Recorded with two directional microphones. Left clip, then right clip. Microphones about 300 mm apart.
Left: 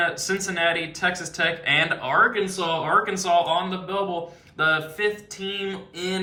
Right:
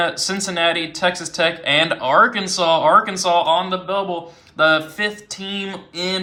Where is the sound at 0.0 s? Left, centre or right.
Centre.